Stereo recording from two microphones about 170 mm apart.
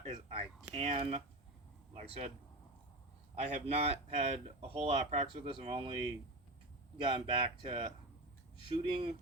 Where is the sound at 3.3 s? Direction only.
40° right (ahead or behind).